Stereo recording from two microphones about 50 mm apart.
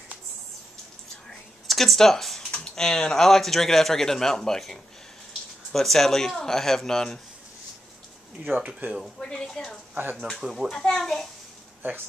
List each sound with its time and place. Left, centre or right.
1.7 s speech: centre
8.5 s speech: right
9.2 s speech: centre